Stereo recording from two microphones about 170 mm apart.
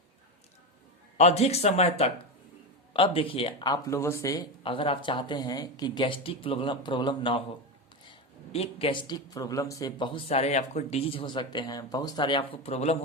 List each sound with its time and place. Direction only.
1.2 s speech: 40° left (ahead or behind); by 4.4 s 20° left (ahead or behind)
4.6 s speech: 30° left (ahead or behind)
8.5 s speech: 35° left (ahead or behind)